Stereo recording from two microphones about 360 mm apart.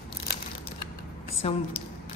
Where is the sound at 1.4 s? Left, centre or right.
Centre.